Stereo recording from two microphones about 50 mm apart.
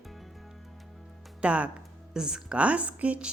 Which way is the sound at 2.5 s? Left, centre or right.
Right.